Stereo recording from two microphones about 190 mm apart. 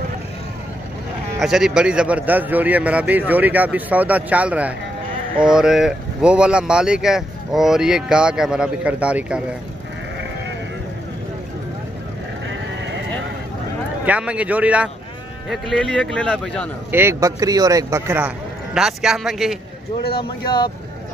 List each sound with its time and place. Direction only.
1.4 s a man's voice: centre (ahead or behind)
14.0 s a man's voice: 5° right (ahead or behind)
16.9 s a man's voice: 15° right (ahead or behind)
20.2 s speech: 25° left (ahead or behind)